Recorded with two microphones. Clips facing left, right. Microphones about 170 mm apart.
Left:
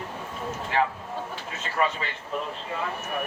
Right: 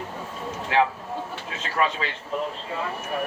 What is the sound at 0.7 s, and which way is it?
Speech, 90° right.